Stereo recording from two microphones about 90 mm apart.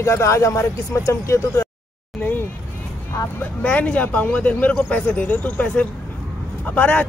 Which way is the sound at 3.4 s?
15° left (ahead or behind).